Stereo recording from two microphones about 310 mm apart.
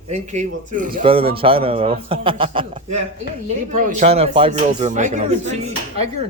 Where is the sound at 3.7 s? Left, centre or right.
Right.